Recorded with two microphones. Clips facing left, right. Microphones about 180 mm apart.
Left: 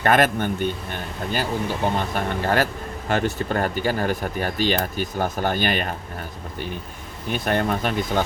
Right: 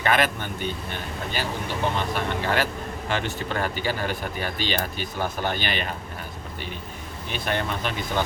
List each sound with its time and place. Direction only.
0.0 s speech: 45° left (ahead or behind)
7.3 s speech: 45° left (ahead or behind)